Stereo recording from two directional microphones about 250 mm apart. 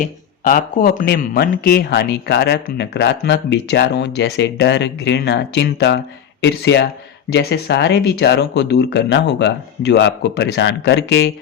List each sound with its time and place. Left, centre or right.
0.0 s speech: left